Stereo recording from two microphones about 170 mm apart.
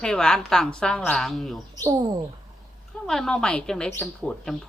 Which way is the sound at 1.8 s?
20° right (ahead or behind).